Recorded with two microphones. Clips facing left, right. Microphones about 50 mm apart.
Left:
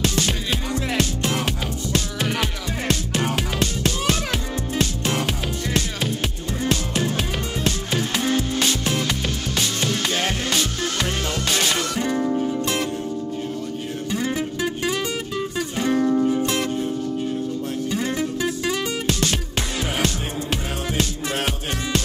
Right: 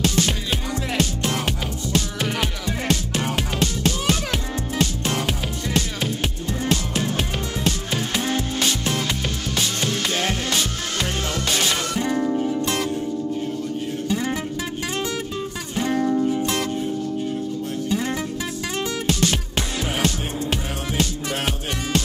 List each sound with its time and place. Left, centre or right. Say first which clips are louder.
0.1 s music: right 1 dB; right
0.9 s music: right 1 dB; left
3.6 s music: right 2 dB; left
5.8 s music: right 1 dB; right
7.6 s music: left 1 dB; left
11.1 s music: even; left
14.0 s music: left 1 dB; left
19.2 s music: right 1 dB; left
20.9 s music: right 1 dB; left